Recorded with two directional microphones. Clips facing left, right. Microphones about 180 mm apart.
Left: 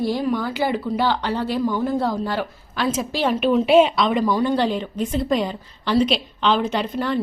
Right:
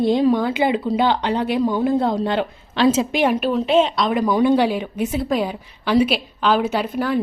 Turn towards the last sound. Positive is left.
turn(degrees=-5)  # may be behind; listen again after turning